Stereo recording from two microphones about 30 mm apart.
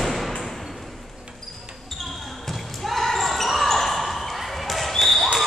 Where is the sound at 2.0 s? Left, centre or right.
Centre.